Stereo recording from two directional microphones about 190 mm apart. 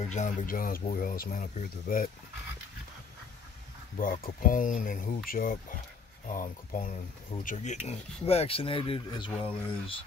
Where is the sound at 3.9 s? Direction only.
45° left (ahead or behind); by 9.3 s 25° left (ahead or behind).